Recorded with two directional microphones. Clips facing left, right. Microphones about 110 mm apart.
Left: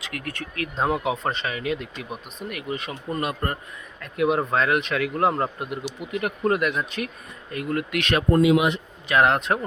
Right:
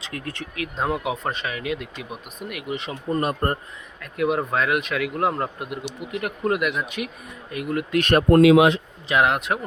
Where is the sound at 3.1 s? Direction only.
40° right (ahead or behind).